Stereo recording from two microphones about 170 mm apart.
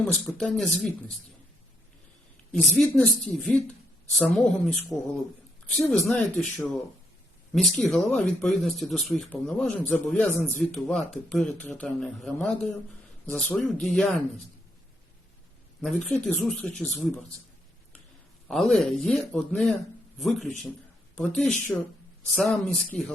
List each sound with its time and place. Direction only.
0.0 s speech: centre (ahead or behind)
2.5 s speech: centre (ahead or behind)
7.5 s speech: centre (ahead or behind)
15.8 s speech: 5° left (ahead or behind)
18.4 s speech: centre (ahead or behind)